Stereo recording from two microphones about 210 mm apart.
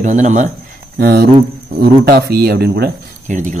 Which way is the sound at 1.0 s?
50° right (ahead or behind).